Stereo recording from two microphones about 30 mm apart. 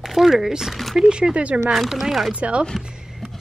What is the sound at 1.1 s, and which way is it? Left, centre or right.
Speech, right.